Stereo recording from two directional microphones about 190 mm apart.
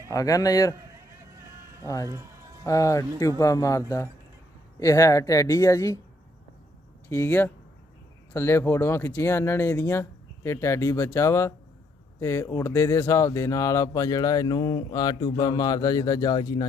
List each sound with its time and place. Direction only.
0.1 s speech: 20° left (ahead or behind)
1.2 s a sound: 15° right (ahead or behind)
2.6 s speech: 15° left (ahead or behind)
7.1 s speech: 10° left (ahead or behind)